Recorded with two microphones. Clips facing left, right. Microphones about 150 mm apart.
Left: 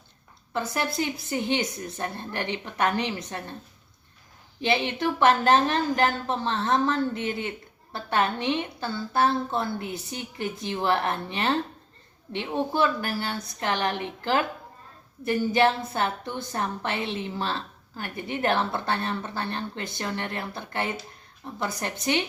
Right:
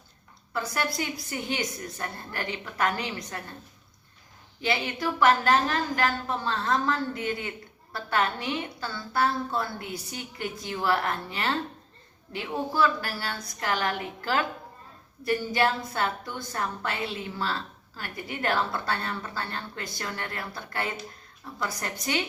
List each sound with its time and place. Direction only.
0.5 s a woman's voice: 25° left (ahead or behind)
4.6 s a woman's voice: 25° left (ahead or behind)